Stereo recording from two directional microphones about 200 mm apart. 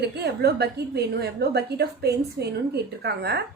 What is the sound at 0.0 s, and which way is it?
A woman's voice, 55° right (ahead or behind).